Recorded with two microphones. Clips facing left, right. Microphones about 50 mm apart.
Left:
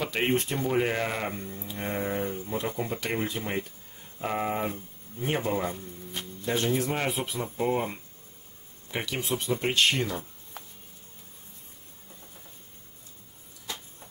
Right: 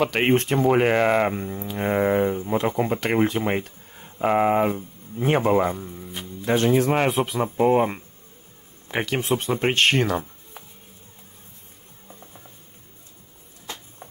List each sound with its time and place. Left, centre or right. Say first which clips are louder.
0.0 s speech: right 7 dB; right
1.3 s speech: right 8 dB; right
1.6 s speech: right 10 dB; right
2.2 s speech: right 9 dB; right
5.3 s a man's voice: right 9 dB; right
7.2 s speech: right 9 dB; right
7.5 s speech: right 9 dB; right
10.6 s music: right 1 dB; centre